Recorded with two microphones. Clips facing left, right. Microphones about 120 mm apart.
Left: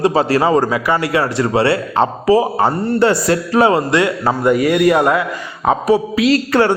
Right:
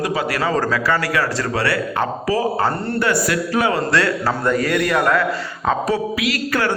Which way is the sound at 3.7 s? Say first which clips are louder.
Left 3 dB; 20° left (ahead or behind).